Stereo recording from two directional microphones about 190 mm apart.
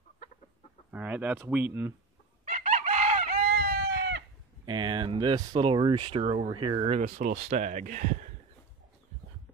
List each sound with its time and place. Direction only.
0.9 s speech: 10° right (ahead or behind)
2.4 s chicken: 40° right (ahead or behind)
3.3 s chicken: 60° right (ahead or behind)
4.6 s speech: 25° right (ahead or behind); by 8.3 s 45° right (ahead or behind)